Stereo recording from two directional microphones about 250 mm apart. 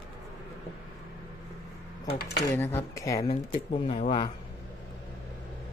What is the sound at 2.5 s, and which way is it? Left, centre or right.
Speech, centre.